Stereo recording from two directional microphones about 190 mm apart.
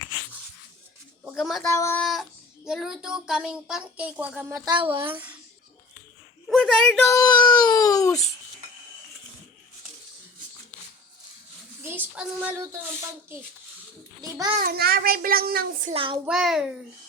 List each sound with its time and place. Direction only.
1.3 s speech: centre (ahead or behind)
1.7 s speech: 15° left (ahead or behind)
2.0 s speech: centre (ahead or behind)
4.6 s a woman's voice: 25° right (ahead or behind)
5.1 s a child's voice: 10° right (ahead or behind)
6.5 s a sound: centre (ahead or behind)
7.1 s speech: 20° left (ahead or behind)
11.8 s speech: 10° right (ahead or behind)
14.2 s a child's voice: 20° right (ahead or behind)
14.6 s a child's voice: 55° right (ahead or behind)
15.9 s a woman's voice: 30° right (ahead or behind)
16.2 s speech: centre (ahead or behind)